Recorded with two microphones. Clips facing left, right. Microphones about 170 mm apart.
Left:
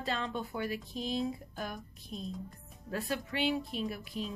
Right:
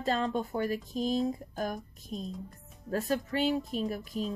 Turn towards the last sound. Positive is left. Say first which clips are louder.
# right 4 dB
turn(degrees=-45)  # may be behind; listen again after turning